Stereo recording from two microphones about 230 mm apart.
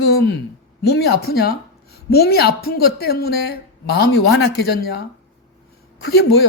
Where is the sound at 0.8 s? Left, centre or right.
Left.